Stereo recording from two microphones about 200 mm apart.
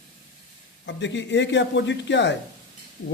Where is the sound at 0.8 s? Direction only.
65° left (ahead or behind).